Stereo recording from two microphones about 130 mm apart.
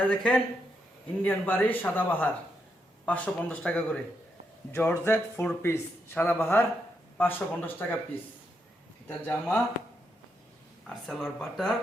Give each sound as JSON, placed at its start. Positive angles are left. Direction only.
{"t": 0.0, "sound": "speech", "side_deg": 10}
{"t": 9.0, "sound": "speech", "side_deg": 15}
{"t": 10.8, "sound": "speech", "side_deg": 5}